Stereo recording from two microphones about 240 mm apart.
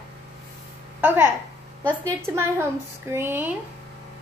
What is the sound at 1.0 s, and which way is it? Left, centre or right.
A woman's voice, centre.